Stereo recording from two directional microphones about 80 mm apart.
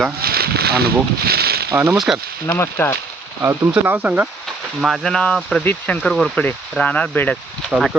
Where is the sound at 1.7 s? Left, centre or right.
Right.